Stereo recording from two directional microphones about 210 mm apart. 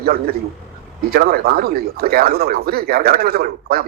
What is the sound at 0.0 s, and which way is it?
A man's voice, 45° right (ahead or behind).